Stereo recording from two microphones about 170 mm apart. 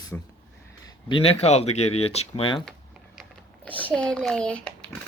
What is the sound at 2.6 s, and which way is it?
Typing, centre (ahead or behind).